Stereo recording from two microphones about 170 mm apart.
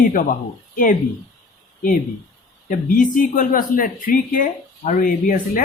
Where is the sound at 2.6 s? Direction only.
55° left (ahead or behind).